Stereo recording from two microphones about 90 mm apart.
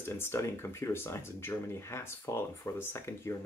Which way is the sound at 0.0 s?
25° left (ahead or behind).